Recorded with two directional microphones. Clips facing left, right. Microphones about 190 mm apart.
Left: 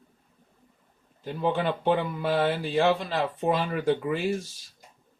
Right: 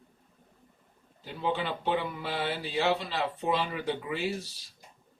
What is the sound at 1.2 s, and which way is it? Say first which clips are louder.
Speech: left 5 dB; 50° left (ahead or behind).